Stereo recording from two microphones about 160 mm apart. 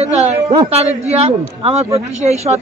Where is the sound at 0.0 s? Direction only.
40° right (ahead or behind).